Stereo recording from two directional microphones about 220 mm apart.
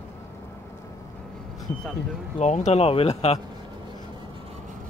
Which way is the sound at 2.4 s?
30° left (ahead or behind).